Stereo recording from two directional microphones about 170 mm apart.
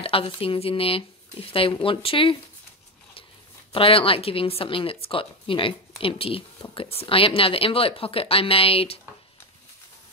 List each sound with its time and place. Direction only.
0.0 s a woman's voice: 35° left (ahead or behind)
3.7 s a woman's voice: 30° left (ahead or behind)